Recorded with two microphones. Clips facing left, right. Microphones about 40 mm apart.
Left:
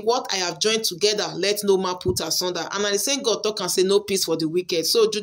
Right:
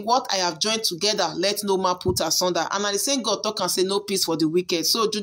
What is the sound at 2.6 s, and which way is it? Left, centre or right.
Speech, centre.